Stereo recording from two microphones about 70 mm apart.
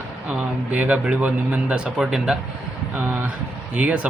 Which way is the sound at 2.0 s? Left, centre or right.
Centre.